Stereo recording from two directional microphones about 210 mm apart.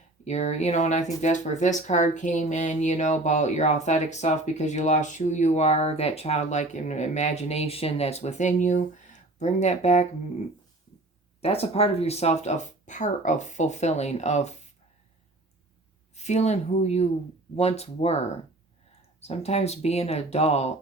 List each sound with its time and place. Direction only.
0.3 s speech: 30° left (ahead or behind)
11.3 s speech: 30° left (ahead or behind)
16.1 s speech: 30° left (ahead or behind)
19.2 s speech: 30° left (ahead or behind)